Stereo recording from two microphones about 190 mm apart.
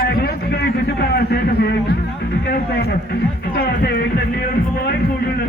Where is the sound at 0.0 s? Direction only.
55° left (ahead or behind).